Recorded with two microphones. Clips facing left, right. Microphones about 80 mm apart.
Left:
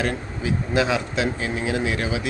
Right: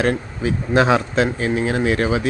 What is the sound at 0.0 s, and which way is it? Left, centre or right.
Speech, right.